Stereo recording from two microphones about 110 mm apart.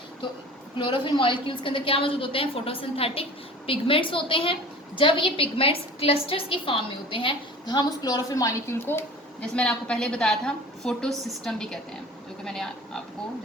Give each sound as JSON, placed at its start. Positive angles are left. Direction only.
{"t": 0.8, "sound": "a woman's voice", "side_deg": 50}
{"t": 7.6, "sound": "a woman's voice", "side_deg": 40}
{"t": 9.4, "sound": "a woman's voice", "side_deg": 10}